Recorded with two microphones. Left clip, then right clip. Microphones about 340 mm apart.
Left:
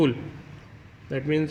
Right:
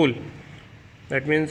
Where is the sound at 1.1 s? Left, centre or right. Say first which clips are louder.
Right 4 dB; right.